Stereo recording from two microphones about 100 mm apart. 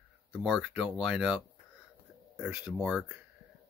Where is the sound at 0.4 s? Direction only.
10° right (ahead or behind).